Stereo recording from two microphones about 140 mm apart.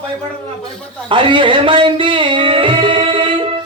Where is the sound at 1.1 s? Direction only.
35° right (ahead or behind).